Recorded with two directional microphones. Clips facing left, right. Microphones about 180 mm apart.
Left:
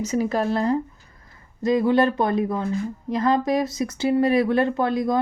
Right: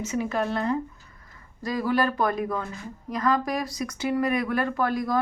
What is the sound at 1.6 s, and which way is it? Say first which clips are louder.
Speech: left 6 dB; 25° left (ahead or behind).